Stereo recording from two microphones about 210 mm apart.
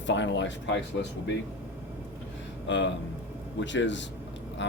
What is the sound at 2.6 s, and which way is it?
Speech, 60° left (ahead or behind).